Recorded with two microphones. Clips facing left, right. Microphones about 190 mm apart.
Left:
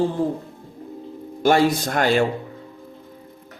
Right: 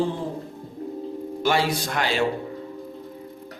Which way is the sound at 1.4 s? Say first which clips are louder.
Left 6 dB; 45° left (ahead or behind).